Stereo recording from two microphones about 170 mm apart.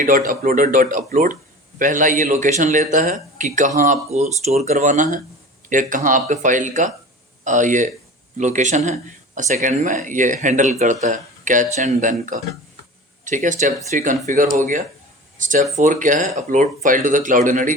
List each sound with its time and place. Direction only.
0.0 s speech: 50° right (ahead or behind)